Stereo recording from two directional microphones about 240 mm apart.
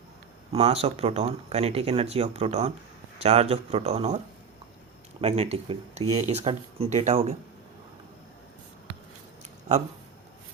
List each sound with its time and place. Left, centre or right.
0.5 s speech: right
5.2 s speech: right